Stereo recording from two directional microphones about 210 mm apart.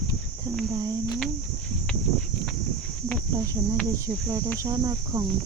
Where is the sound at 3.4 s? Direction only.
15° right (ahead or behind).